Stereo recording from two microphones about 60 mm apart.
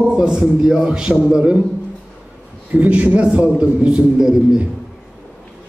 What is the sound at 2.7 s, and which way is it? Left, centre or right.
A man's voice, right.